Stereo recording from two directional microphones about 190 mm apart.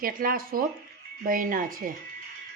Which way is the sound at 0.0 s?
50° right (ahead or behind).